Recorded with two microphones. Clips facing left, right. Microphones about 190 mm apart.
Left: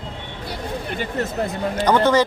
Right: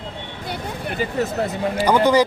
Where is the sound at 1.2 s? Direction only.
Centre (ahead or behind).